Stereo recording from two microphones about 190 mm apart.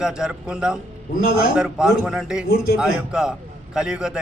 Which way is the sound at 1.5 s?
5° right (ahead or behind).